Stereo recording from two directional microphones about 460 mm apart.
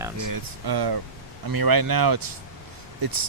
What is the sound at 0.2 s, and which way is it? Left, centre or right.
Speech, right.